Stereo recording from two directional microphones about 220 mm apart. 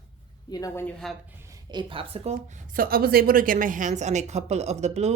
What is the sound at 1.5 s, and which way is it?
A woman's voice, 20° right (ahead or behind).